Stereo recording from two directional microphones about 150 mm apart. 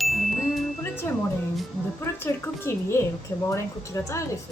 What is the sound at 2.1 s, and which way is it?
Speech, 15° left (ahead or behind).